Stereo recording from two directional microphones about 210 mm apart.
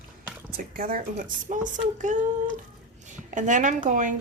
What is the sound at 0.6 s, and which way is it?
Speech, 40° right (ahead or behind).